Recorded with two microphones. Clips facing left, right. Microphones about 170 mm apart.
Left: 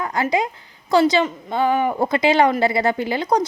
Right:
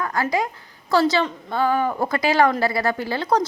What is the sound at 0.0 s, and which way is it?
Speech, 20° left (ahead or behind).